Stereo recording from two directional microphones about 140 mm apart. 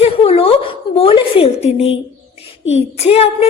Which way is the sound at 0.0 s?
45° left (ahead or behind).